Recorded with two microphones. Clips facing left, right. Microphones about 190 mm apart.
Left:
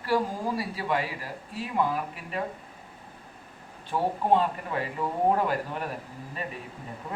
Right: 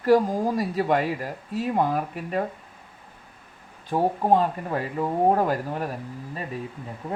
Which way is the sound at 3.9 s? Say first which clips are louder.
Right 3 dB; 40° right (ahead or behind).